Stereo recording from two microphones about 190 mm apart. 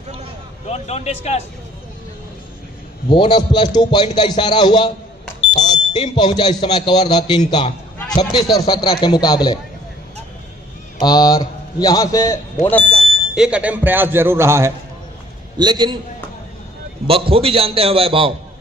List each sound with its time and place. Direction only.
0.7 s speech: 35° left (ahead or behind)
3.1 s speech: 25° left (ahead or behind)
11.0 s a man's voice: 20° left (ahead or behind)
13.3 s a man's voice: 5° right (ahead or behind); by 16.0 s 20° right (ahead or behind)
17.1 s a man's voice: 30° right (ahead or behind)